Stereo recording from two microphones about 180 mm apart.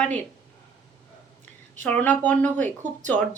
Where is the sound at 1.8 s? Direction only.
10° left (ahead or behind).